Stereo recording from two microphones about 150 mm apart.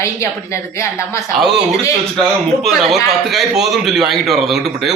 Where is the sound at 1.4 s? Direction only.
5° right (ahead or behind).